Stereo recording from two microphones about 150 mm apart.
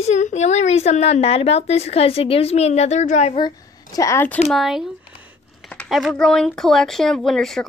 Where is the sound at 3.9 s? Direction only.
20° left (ahead or behind).